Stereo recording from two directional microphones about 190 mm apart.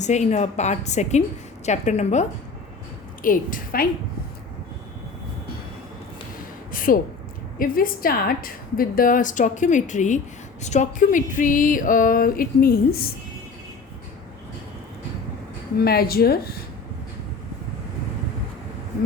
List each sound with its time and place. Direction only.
0.0 s a woman's voice: 40° left (ahead or behind)
3.2 s a woman's voice: 50° left (ahead or behind)
6.7 s a sound: 45° left (ahead or behind)
7.6 s a woman's voice: 50° left (ahead or behind)
15.8 s a woman's voice: 55° left (ahead or behind)